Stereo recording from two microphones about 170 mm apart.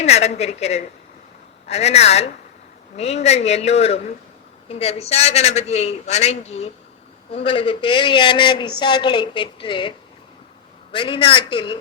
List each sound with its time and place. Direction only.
0.0 s a man's voice: 40° left (ahead or behind)
10.9 s a man's voice: 30° left (ahead or behind)